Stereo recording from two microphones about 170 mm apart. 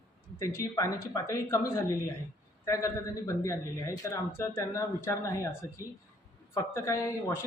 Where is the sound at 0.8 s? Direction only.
20° left (ahead or behind).